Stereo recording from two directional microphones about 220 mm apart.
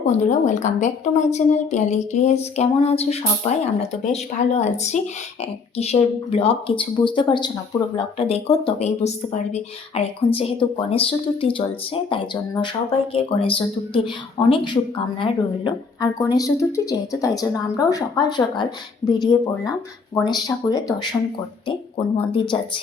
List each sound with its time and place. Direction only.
0.0 s speech: 35° left (ahead or behind)
20.2 s speech: 20° left (ahead or behind)